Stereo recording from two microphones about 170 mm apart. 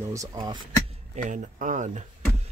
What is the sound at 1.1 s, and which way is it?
Speech, 50° right (ahead or behind).